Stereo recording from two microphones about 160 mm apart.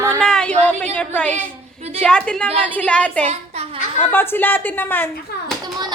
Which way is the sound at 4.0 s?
15° left (ahead or behind).